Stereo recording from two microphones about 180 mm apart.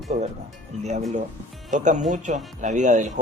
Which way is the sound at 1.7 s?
45° right (ahead or behind).